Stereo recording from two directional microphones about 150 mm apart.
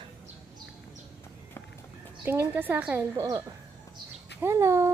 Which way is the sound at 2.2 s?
15° right (ahead or behind).